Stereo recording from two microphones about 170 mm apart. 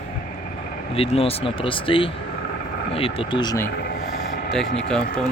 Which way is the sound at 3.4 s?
20° left (ahead or behind).